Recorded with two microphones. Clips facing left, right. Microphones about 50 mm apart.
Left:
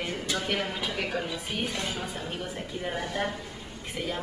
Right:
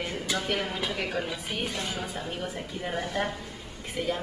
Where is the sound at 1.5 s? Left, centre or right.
Centre.